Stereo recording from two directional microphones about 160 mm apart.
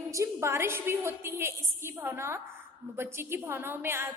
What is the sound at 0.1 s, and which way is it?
A woman's voice, 20° right (ahead or behind).